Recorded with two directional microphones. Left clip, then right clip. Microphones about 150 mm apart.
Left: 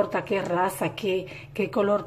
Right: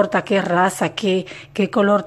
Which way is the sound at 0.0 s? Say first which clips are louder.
Right 8 dB; 35° right (ahead or behind).